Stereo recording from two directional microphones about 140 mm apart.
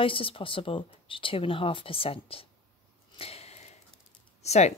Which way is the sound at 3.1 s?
45° left (ahead or behind).